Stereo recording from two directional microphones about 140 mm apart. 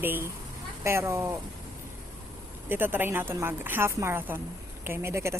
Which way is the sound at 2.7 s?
15° right (ahead or behind).